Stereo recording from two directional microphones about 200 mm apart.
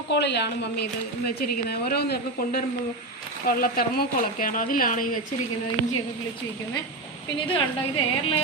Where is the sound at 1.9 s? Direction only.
50° left (ahead or behind).